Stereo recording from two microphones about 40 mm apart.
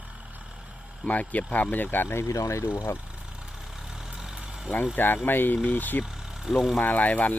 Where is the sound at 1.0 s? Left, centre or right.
Left.